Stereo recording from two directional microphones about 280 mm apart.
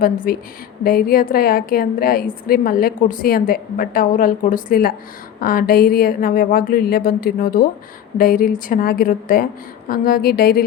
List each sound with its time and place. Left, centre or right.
0.0 s a woman's voice: left